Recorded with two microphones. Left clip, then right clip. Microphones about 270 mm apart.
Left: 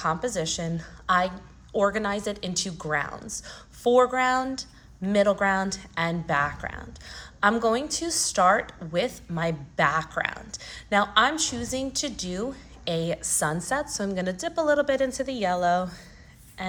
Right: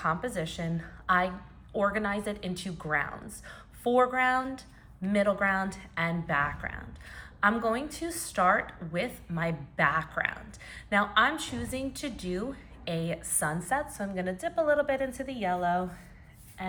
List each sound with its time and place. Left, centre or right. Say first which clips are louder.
0.0 s a woman's voice: left 4 dB; centre